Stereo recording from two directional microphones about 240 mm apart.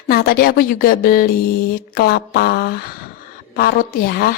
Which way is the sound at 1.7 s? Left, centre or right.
Left.